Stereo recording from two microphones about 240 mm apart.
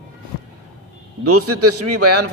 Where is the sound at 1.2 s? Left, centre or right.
Right.